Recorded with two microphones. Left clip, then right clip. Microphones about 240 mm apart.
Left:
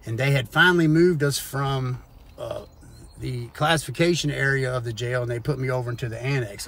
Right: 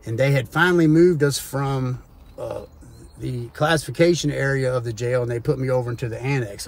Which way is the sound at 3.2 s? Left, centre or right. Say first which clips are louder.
Right 3 dB; left.